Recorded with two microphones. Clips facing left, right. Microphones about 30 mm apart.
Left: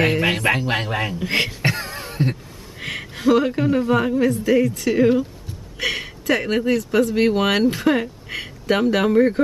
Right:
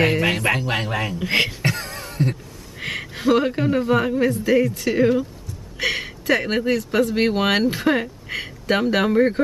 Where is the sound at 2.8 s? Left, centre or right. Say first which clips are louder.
Left 1 dB; centre.